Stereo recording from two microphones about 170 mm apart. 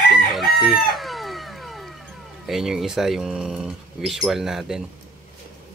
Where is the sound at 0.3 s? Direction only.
Centre (ahead or behind).